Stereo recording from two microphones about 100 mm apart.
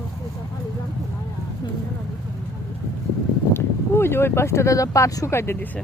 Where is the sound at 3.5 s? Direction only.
25° left (ahead or behind).